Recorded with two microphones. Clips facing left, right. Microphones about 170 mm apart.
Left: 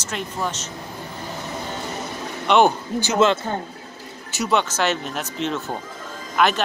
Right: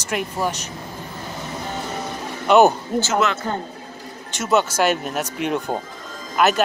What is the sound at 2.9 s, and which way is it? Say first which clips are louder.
Speech: right 3 dB; 50° right (ahead or behind).